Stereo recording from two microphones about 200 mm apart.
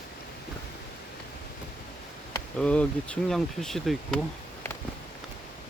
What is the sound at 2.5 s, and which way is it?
Speech, 5° left (ahead or behind).